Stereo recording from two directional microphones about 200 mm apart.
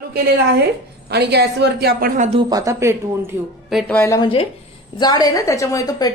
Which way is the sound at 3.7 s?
10° left (ahead or behind).